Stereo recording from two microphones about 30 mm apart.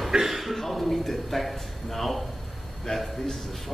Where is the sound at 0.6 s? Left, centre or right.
Centre.